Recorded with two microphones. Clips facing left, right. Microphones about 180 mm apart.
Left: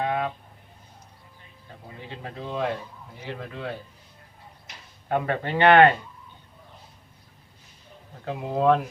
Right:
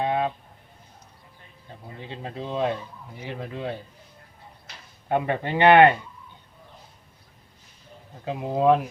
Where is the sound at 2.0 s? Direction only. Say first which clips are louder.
Right 2 dB; 20° right (ahead or behind).